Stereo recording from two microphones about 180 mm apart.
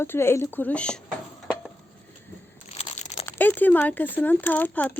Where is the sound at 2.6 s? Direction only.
35° left (ahead or behind).